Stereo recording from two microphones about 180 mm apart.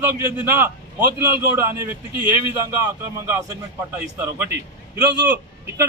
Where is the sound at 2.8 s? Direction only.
20° right (ahead or behind).